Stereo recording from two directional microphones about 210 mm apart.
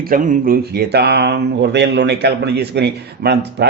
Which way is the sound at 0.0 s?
45° right (ahead or behind).